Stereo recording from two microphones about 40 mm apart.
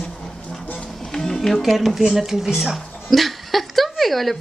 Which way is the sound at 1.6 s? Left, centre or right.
Centre.